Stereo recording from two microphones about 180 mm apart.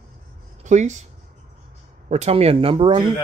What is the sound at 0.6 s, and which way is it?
Speech, 40° right (ahead or behind).